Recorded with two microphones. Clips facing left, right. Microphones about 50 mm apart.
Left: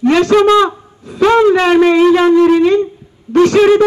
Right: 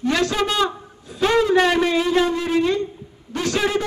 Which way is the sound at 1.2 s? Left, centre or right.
Left.